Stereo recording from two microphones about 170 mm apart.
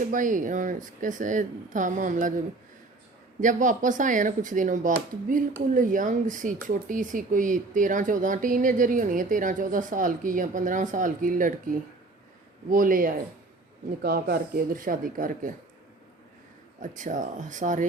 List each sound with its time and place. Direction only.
0.1 s speech: 50° right (ahead or behind)
3.4 s speech: 50° right (ahead or behind)
16.8 s speech: 50° right (ahead or behind)